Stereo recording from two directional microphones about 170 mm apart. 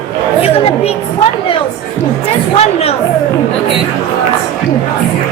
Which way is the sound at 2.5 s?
40° left (ahead or behind).